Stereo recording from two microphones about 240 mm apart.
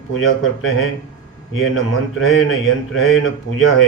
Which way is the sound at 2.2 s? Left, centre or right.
Left.